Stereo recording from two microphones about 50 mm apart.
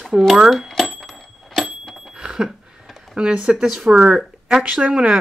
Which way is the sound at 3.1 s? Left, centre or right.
Right.